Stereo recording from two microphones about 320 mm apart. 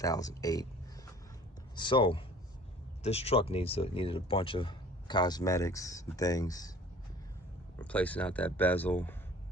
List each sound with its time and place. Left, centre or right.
0.0 s speech: centre
1.7 s speech: centre
7.8 s speech: centre